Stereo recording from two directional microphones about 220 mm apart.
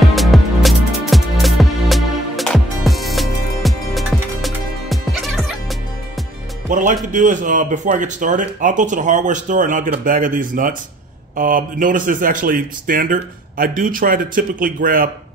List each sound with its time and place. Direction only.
0.0 s music: centre (ahead or behind)
6.7 s speech: 35° right (ahead or behind)